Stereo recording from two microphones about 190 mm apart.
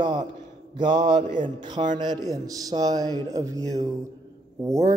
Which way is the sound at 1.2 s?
40° right (ahead or behind).